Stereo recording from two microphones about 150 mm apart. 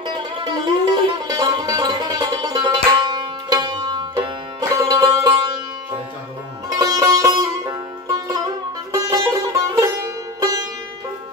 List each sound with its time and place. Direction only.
0.7 s music: 30° right (ahead or behind)
6.7 s music: 25° right (ahead or behind)